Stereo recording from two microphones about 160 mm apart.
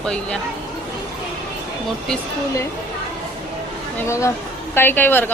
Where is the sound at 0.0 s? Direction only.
5° left (ahead or behind).